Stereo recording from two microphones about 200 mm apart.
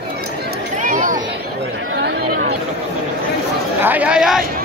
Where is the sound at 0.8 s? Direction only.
40° right (ahead or behind).